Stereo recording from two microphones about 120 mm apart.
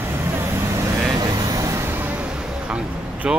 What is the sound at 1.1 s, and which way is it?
Vehicle, 35° right (ahead or behind).